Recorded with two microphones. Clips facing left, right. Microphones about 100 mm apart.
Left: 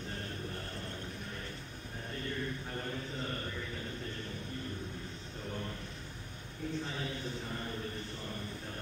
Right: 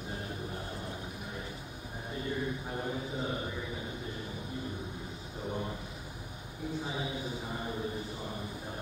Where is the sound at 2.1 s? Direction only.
15° right (ahead or behind).